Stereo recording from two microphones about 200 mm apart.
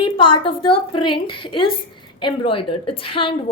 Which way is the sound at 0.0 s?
25° left (ahead or behind).